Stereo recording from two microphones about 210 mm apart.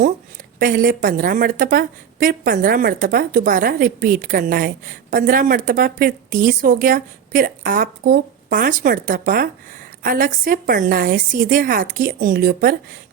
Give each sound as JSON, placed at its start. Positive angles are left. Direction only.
{"t": 0.6, "sound": "a woman's voice", "side_deg": -40}